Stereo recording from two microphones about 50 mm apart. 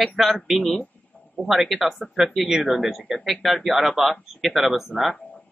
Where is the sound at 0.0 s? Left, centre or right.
Centre.